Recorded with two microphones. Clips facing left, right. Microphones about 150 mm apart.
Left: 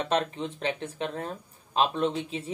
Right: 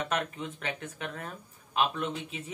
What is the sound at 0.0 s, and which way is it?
Speech, 30° left (ahead or behind).